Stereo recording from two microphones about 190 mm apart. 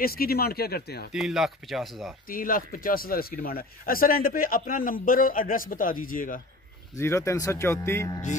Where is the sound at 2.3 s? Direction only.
45° left (ahead or behind).